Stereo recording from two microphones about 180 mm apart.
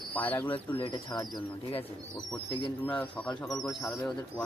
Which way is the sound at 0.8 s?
25° left (ahead or behind).